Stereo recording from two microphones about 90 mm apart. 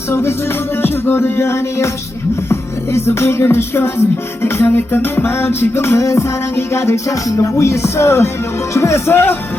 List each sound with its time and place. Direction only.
0.1 s music: 25° left (ahead or behind)